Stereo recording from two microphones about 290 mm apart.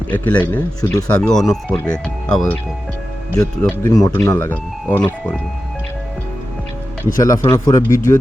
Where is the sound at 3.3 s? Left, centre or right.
Centre.